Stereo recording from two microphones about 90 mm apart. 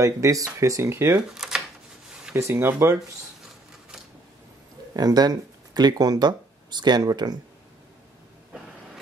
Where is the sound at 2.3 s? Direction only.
25° right (ahead or behind).